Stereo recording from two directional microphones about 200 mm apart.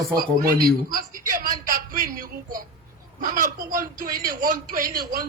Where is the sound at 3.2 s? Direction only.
45° right (ahead or behind).